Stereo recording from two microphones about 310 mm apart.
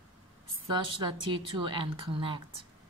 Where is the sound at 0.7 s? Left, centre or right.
Centre.